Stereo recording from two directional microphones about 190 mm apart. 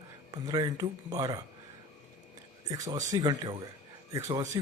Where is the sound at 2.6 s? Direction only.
20° right (ahead or behind).